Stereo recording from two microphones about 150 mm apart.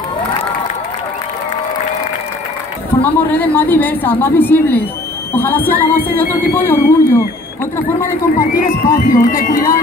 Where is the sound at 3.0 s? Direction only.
10° left (ahead or behind).